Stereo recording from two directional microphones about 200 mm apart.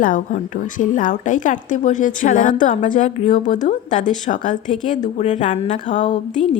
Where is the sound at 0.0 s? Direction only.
40° left (ahead or behind).